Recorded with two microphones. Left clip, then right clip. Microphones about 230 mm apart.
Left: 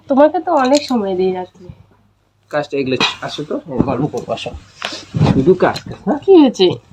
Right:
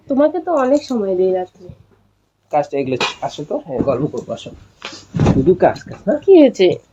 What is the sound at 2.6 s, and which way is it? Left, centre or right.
Speech, left.